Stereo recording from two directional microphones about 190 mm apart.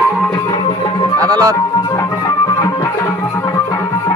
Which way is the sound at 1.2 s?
15° right (ahead or behind).